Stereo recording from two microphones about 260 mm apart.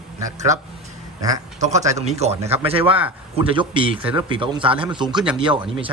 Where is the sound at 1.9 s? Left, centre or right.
Right.